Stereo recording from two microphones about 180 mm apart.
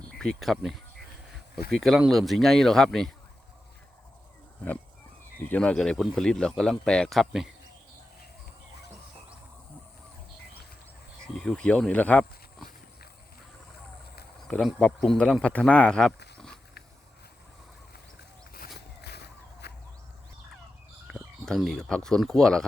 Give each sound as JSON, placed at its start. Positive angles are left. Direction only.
{"t": 0.2, "sound": "speech", "side_deg": 0}
{"t": 5.4, "sound": "speech", "side_deg": 10}
{"t": 11.3, "sound": "speech", "side_deg": 5}
{"t": 14.4, "sound": "speech", "side_deg": 5}
{"t": 19.6, "sound": "whip", "side_deg": 65}
{"t": 21.1, "sound": "speech", "side_deg": 0}